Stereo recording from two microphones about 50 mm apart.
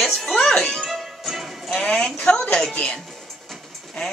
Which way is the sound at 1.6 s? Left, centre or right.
Centre.